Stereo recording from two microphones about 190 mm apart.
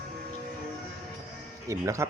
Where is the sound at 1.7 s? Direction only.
15° right (ahead or behind).